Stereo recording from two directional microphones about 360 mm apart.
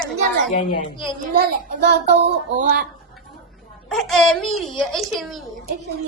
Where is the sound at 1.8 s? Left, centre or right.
Right.